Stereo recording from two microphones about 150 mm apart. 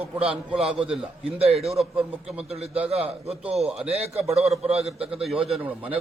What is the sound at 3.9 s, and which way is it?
A man's voice, 45° right (ahead or behind).